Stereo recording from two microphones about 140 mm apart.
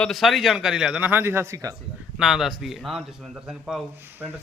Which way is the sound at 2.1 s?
5° right (ahead or behind).